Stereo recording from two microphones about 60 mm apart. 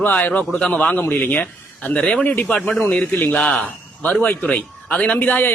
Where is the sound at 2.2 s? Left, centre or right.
Left.